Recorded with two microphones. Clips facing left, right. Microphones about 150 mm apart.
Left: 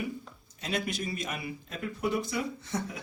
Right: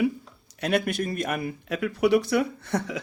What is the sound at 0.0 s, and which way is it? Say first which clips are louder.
Speech: right 11 dB; 75° right (ahead or behind).